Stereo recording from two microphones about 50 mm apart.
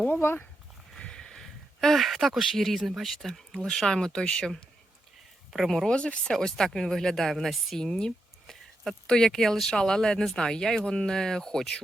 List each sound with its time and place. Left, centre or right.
0.1 s speech: left
0.9 s speech: centre
5.5 s speech: centre
5.9 s speech: centre
6.3 s speech: centre